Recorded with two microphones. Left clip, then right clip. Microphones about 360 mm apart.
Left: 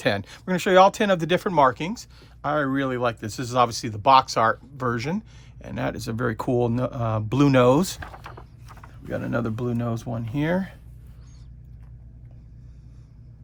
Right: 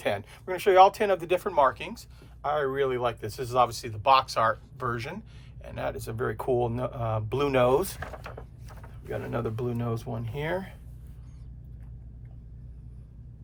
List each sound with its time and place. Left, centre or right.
0.0 s speech: left
9.0 s speech: left